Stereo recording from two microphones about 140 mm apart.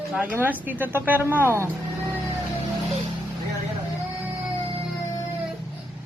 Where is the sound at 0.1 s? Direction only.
10° right (ahead or behind).